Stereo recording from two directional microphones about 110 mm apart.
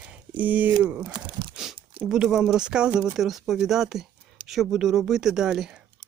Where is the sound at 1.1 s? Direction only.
45° right (ahead or behind).